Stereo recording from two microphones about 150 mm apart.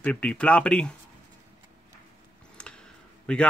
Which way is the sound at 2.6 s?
10° left (ahead or behind).